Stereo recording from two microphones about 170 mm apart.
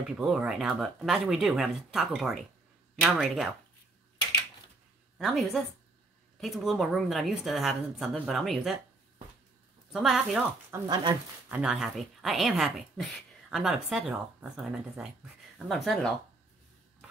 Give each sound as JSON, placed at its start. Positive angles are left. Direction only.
{"t": 0.0, "sound": "speech", "side_deg": -5}
{"t": 5.2, "sound": "speech", "side_deg": 0}
{"t": 9.9, "sound": "speech", "side_deg": -5}
{"t": 10.7, "sound": "speech", "side_deg": -25}
{"t": 11.4, "sound": "a woman's voice", "side_deg": -10}